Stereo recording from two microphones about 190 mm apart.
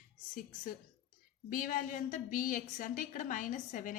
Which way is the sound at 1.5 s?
45° left (ahead or behind).